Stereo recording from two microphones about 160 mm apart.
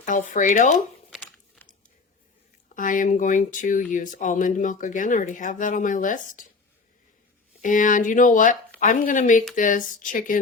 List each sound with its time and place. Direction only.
0.0 s speech: 55° left (ahead or behind)
1.1 s chewing: 10° left (ahead or behind)
2.7 s speech: 55° left (ahead or behind)
7.6 s speech: 55° left (ahead or behind)